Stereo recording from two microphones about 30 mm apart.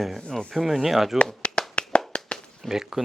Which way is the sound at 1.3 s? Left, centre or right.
Left.